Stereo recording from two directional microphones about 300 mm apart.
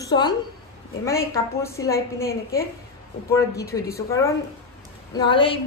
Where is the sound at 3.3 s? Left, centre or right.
Centre.